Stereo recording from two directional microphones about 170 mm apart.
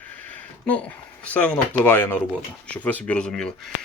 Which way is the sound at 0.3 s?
10° left (ahead or behind).